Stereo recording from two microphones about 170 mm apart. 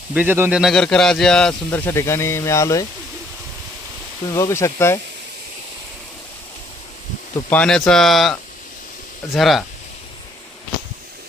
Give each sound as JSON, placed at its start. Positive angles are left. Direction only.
{"t": 0.1, "sound": "speech", "side_deg": -10}
{"t": 0.6, "sound": "a man's voice", "side_deg": 5}
{"t": 4.3, "sound": "a man's voice", "side_deg": 15}
{"t": 7.5, "sound": "speech", "side_deg": 5}